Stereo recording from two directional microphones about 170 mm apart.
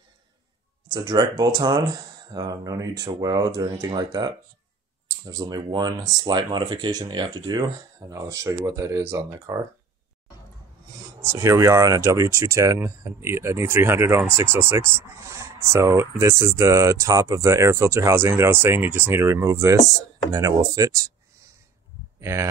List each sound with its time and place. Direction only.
0.8 s speech: 25° right (ahead or behind)
11.1 s speech: 15° right (ahead or behind)
22.2 s speech: 15° right (ahead or behind)